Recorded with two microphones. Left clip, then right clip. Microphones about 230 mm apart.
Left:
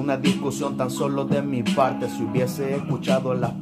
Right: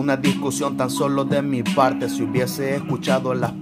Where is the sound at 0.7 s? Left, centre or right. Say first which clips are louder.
Right 4 dB; right.